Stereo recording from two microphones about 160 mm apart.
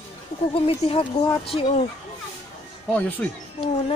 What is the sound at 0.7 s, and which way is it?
Speech, 35° left (ahead or behind).